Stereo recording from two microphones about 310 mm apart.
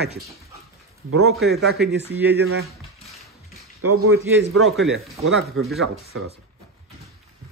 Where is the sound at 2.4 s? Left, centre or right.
Right.